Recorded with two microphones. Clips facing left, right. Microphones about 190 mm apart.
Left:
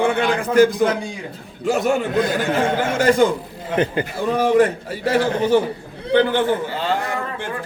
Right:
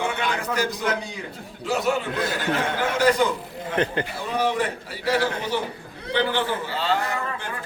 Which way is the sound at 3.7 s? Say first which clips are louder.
Left 4 dB; 10° left (ahead or behind).